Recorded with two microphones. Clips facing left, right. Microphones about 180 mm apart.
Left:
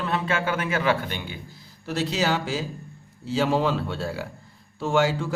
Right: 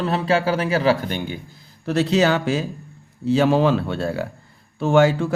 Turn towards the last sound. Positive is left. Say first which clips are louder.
# right 6 dB
turn(degrees=-60)  # may be behind; listen again after turning